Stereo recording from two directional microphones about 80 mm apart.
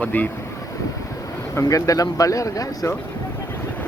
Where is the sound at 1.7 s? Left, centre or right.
Left.